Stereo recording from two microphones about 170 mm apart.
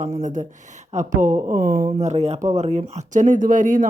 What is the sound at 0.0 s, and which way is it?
Speech, 45° right (ahead or behind).